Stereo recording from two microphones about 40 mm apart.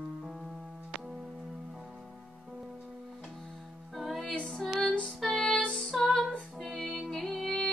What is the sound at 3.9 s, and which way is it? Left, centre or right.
Music, centre.